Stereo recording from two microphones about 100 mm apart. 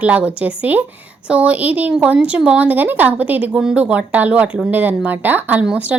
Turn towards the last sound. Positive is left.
turn(degrees=-15)  # may be behind; listen again after turning